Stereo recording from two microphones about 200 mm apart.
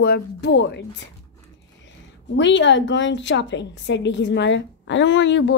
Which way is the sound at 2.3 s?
65° left (ahead or behind).